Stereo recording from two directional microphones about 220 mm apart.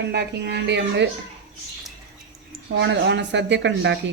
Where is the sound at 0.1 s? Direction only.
50° right (ahead or behind).